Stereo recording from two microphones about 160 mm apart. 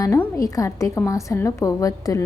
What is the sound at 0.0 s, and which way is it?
A woman's voice, 20° left (ahead or behind).